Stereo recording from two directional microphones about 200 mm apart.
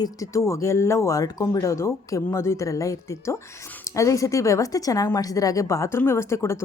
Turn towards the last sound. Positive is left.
turn(degrees=15)  # may be behind; listen again after turning